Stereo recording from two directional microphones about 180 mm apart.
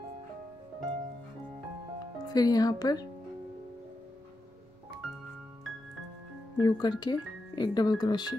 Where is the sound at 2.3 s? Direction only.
20° left (ahead or behind).